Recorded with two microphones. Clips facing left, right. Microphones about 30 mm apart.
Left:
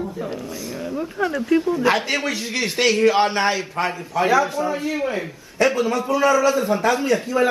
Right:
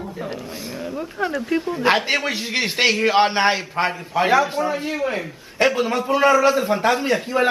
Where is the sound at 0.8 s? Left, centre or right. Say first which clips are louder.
Left 2 dB; centre.